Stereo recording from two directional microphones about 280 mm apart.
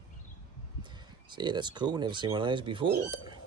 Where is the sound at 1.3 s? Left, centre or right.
Centre.